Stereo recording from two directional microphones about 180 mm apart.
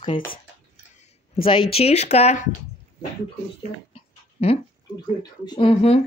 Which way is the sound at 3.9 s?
35° left (ahead or behind).